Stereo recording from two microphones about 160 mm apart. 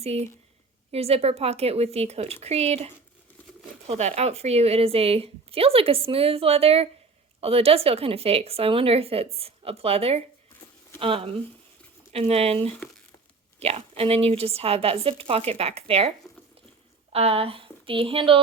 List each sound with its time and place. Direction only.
0.0 s a woman's voice: 40° right (ahead or behind)